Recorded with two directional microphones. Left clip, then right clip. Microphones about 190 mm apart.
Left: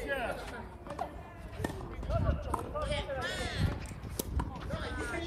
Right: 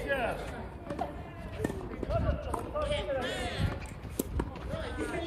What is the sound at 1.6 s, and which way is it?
Run, 35° left (ahead or behind).